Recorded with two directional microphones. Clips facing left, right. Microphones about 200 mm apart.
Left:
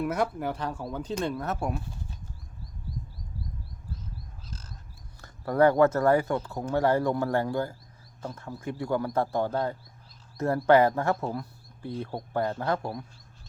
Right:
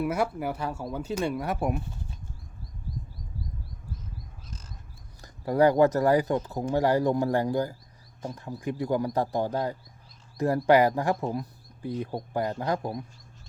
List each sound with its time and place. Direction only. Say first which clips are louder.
0.0 s speech: right 1 dB; 10° right (ahead or behind)
5.2 s speech: even; 15° right (ahead or behind)